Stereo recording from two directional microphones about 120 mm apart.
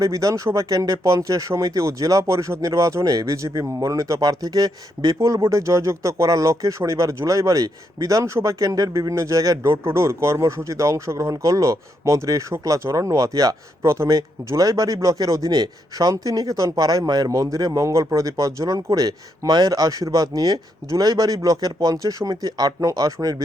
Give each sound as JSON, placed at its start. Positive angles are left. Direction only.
{"t": 0.0, "sound": "speech", "side_deg": -30}